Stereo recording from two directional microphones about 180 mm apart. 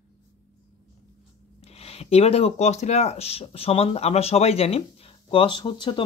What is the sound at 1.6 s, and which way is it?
Speech, 35° left (ahead or behind).